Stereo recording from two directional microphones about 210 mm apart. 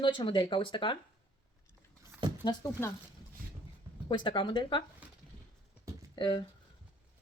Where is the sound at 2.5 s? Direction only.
15° left (ahead or behind).